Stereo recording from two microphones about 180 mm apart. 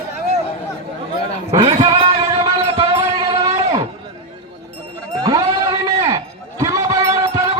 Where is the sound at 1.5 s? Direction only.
20° right (ahead or behind).